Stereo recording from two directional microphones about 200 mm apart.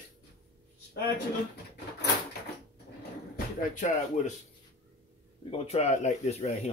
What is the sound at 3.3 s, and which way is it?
Speech, 40° left (ahead or behind).